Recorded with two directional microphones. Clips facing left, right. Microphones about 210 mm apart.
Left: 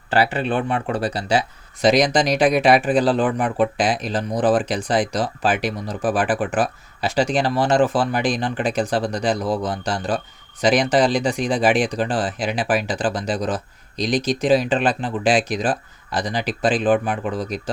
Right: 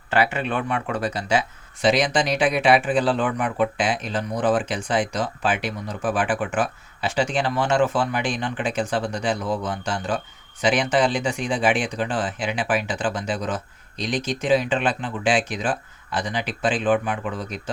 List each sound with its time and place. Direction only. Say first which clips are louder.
0.1 s speech: left 3 dB; 35° left (ahead or behind)